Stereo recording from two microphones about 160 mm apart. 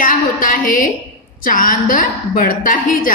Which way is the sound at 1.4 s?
60° left (ahead or behind).